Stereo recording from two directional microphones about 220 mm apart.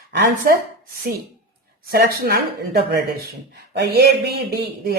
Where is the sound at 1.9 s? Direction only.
45° right (ahead or behind).